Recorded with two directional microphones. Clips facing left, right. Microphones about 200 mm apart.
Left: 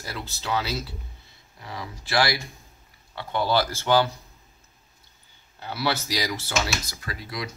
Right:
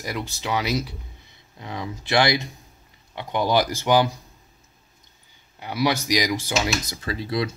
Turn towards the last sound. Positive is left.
turn(degrees=-25)  # may be behind; listen again after turning